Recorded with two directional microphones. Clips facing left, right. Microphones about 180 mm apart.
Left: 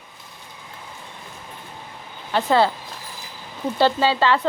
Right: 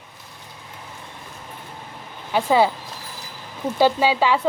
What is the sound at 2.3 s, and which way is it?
Speech, 10° right (ahead or behind).